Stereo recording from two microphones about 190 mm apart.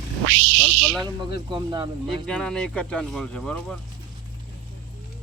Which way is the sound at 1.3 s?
25° right (ahead or behind).